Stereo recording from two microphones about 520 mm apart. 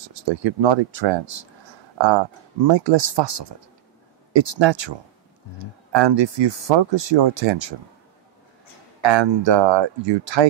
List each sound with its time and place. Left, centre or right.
0.0 s speech: right
9.0 s speech: right